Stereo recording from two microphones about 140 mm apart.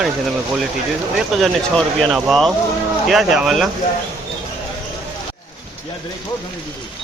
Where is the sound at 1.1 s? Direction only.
Centre (ahead or behind).